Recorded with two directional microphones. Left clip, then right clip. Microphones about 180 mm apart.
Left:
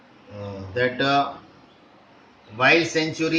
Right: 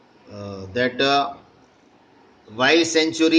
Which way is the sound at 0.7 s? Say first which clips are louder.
Right 2 dB; 65° right (ahead or behind).